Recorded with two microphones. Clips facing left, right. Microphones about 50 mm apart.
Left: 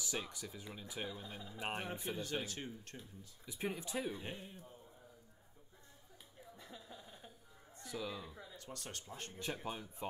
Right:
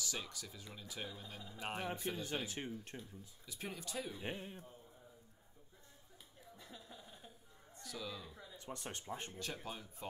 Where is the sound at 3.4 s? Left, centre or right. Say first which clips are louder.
Left 5 dB; centre.